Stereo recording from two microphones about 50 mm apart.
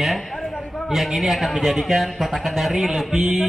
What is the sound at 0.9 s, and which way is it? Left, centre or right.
Speech, centre.